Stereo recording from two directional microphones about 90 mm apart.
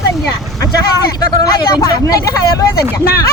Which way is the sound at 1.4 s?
45° left (ahead or behind).